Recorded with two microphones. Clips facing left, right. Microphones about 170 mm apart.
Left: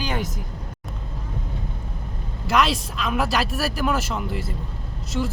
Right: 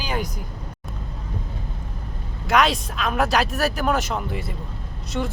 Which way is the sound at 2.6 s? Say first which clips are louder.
Right 1 dB; centre (ahead or behind).